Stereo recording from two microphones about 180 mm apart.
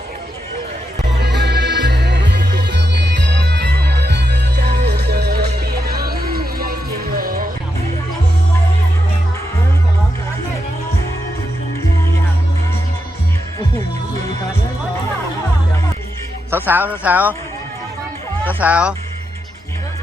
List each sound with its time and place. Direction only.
1.2 s music: 70° right (ahead or behind); by 7.4 s 55° right (ahead or behind)
16.5 s speech: 10° right (ahead or behind)
18.6 s speech: 5° right (ahead or behind)